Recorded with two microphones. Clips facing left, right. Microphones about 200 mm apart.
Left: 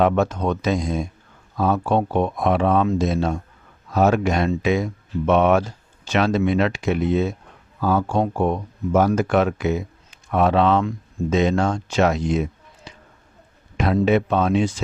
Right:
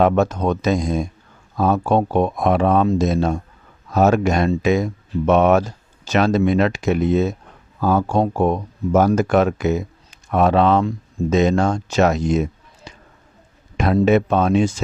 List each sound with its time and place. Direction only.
0.0 s speech: 40° right (ahead or behind)